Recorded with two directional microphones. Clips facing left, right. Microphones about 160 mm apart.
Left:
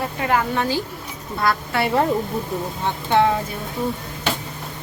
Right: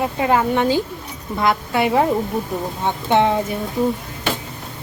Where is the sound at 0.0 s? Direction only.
20° right (ahead or behind).